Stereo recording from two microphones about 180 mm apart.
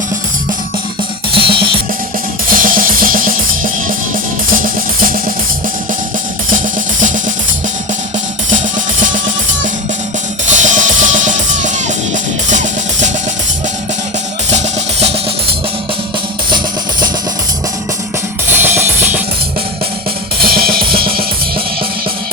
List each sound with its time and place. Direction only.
1.4 s music: 30° right (ahead or behind)
2.5 s music: 50° right (ahead or behind)
10.5 s music: 45° right (ahead or behind)
14.5 s music: 35° right (ahead or behind)
18.4 s drum kit: 10° right (ahead or behind)
20.4 s drum kit: 55° right (ahead or behind)